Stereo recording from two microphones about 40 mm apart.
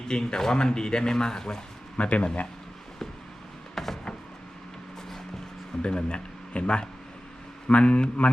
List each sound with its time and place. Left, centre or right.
0.1 s speech: left
2.0 s speech: left
3.8 s music: centre
5.8 s speech: left